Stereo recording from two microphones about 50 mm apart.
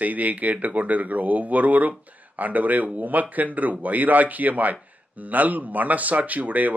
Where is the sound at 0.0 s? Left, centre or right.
Right.